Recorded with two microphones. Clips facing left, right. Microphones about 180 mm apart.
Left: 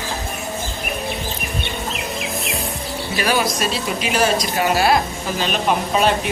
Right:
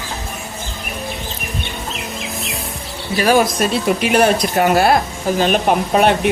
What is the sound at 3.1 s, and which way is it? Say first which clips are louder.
Speech: right 6 dB; 45° right (ahead or behind).